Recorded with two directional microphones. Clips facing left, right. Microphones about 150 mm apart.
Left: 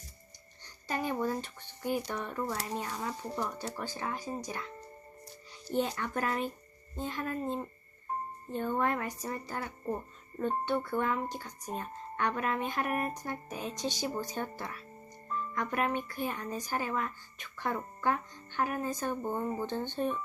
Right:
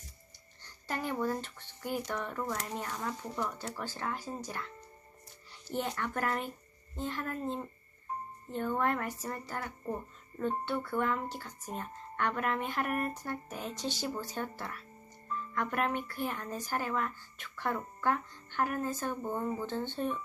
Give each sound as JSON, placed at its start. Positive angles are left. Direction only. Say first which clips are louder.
{"t": 0.6, "sound": "a sound", "louder": "left 2 dB", "side_deg": 15}
{"t": 2.0, "sound": "speech", "louder": "left 1 dB", "side_deg": 15}
{"t": 3.2, "sound": "speech", "louder": "left 1 dB", "side_deg": 35}
{"t": 3.8, "sound": "speech", "louder": "left 1 dB", "side_deg": 15}